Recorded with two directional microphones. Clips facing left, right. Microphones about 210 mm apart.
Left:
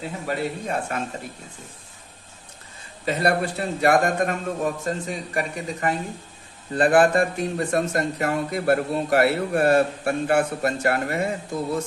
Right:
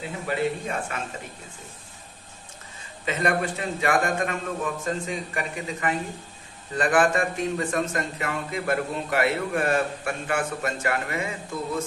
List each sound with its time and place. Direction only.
0.3 s speech: 40° left (ahead or behind)
3.1 s speech: 35° left (ahead or behind)